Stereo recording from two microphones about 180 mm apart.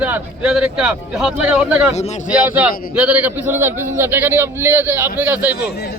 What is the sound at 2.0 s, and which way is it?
Speech, 40° left (ahead or behind).